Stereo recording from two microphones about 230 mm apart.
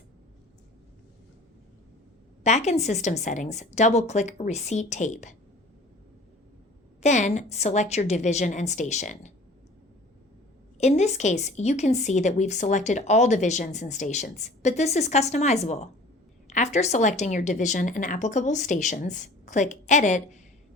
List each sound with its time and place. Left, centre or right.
2.4 s a woman's voice: left
7.0 s a woman's voice: left
10.8 s a woman's voice: left